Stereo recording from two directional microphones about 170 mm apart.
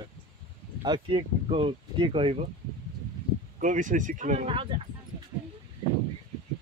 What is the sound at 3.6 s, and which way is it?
Speech, 50° right (ahead or behind).